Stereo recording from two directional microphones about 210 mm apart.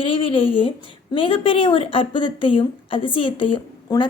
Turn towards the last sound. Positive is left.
turn(degrees=20)  # may be behind; listen again after turning